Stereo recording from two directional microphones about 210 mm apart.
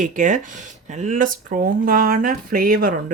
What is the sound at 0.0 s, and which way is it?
Speech, 40° right (ahead or behind).